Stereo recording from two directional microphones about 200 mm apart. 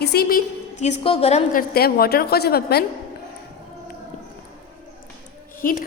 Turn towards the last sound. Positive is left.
turn(degrees=45)  # may be behind; listen again after turning